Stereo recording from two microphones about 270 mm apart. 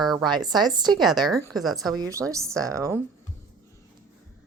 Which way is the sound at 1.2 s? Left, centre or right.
Centre.